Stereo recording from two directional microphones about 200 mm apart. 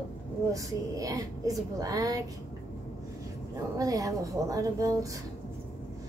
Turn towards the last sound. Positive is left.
turn(degrees=-15)  # may be behind; listen again after turning